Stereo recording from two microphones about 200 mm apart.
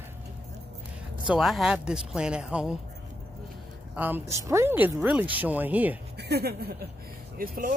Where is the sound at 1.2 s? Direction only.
Centre (ahead or behind).